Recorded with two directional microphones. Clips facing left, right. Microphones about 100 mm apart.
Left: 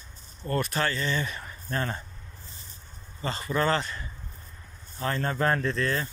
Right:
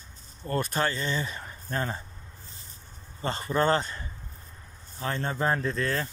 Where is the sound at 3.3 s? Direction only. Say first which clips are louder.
Right 1 dB; 40° right (ahead or behind).